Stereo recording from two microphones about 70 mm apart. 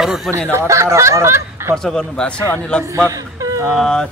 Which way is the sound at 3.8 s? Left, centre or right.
Centre.